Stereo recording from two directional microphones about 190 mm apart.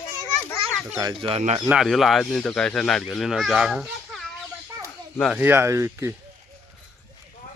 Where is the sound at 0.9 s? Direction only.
20° right (ahead or behind).